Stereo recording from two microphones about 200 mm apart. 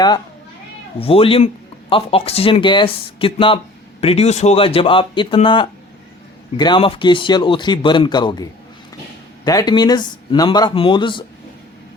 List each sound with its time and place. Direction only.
0.9 s speech: 30° left (ahead or behind)